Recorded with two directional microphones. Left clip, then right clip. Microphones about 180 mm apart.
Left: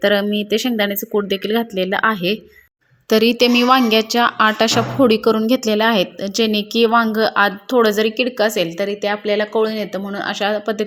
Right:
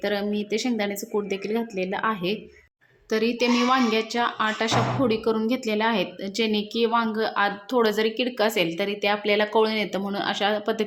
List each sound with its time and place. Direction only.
0.0 s a woman's voice: 30° left (ahead or behind)
3.1 s a woman's voice: 40° left (ahead or behind); by 10.8 s 15° left (ahead or behind)